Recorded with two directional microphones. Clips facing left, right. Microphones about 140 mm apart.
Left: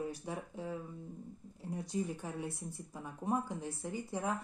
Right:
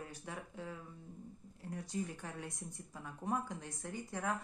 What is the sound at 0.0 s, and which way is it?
Speech, 15° left (ahead or behind).